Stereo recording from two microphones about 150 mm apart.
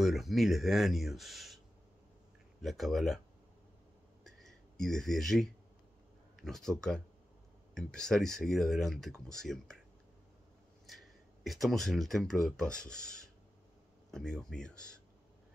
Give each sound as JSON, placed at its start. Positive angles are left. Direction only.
{"t": 0.0, "sound": "speech", "side_deg": 0}
{"t": 2.6, "sound": "speech", "side_deg": 0}
{"t": 4.2, "sound": "a sound", "side_deg": 0}
{"t": 6.4, "sound": "speech", "side_deg": 0}
{"t": 10.9, "sound": "speech", "side_deg": 0}